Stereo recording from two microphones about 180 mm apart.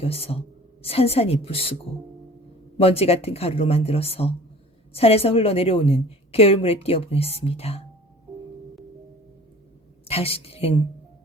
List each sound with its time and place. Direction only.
0.0 s a woman's voice: 35° left (ahead or behind)
2.7 s a woman's voice: 35° left (ahead or behind)
10.1 s a woman's voice: 35° left (ahead or behind)